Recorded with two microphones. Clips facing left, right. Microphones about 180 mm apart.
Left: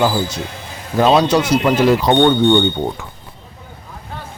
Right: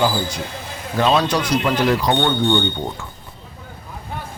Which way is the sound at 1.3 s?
25° left (ahead or behind).